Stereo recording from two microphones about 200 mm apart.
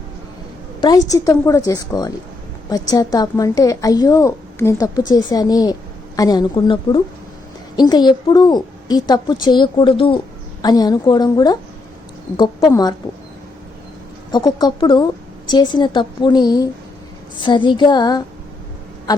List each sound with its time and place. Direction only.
0.8 s a woman's voice: 20° left (ahead or behind)
14.3 s a woman's voice: 20° left (ahead or behind)